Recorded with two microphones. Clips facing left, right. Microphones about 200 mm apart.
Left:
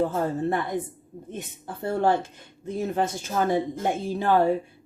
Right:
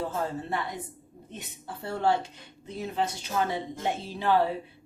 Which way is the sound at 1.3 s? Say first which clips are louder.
Left 5 dB; 50° left (ahead or behind).